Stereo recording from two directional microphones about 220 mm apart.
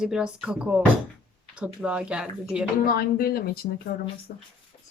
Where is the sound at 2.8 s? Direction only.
45° left (ahead or behind).